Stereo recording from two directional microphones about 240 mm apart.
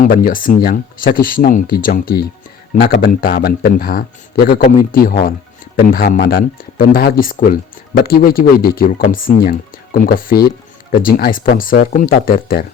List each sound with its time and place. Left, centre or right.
0.0 s speech: left